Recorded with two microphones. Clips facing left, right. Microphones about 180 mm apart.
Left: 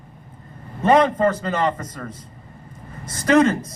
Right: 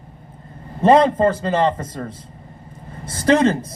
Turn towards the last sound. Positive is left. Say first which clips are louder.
# right 1 dB
turn(degrees=-30)  # may be behind; listen again after turning